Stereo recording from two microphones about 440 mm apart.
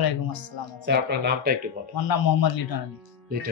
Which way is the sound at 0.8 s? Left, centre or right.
Right.